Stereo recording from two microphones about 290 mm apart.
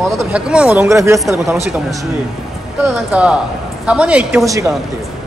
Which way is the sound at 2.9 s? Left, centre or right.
Centre.